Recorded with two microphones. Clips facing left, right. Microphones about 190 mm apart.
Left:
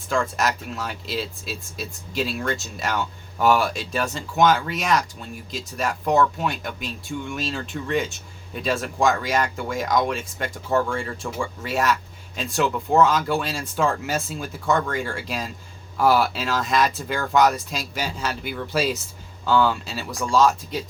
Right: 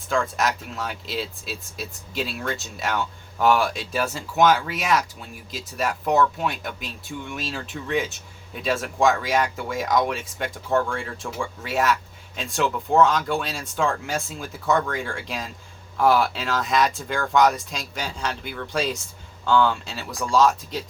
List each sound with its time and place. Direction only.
0.1 s speech: centre (ahead or behind)